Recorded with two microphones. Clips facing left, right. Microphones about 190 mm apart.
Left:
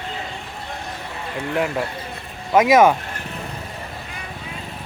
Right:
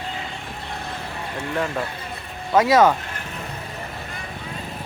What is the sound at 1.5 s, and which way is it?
Speech, 15° left (ahead or behind).